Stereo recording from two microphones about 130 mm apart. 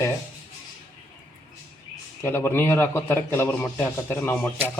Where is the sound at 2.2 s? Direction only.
20° left (ahead or behind).